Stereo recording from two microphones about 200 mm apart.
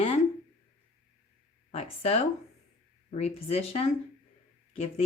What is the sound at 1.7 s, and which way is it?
A woman's voice, 30° left (ahead or behind).